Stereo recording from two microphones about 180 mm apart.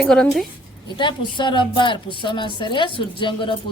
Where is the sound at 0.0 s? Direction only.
5° left (ahead or behind).